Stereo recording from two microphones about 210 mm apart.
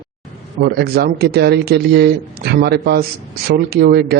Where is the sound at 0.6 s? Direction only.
50° right (ahead or behind).